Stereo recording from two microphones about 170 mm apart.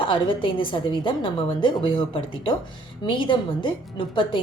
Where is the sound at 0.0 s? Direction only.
30° left (ahead or behind).